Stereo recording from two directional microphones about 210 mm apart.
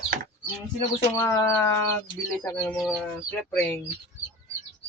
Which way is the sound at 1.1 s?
15° left (ahead or behind).